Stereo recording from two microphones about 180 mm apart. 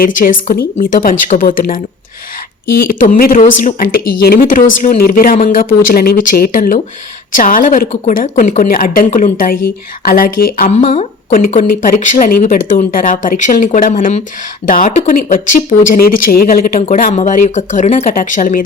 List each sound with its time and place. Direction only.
0.0 s a woman's voice: 50° left (ahead or behind)
17.0 s a woman's voice: 40° left (ahead or behind)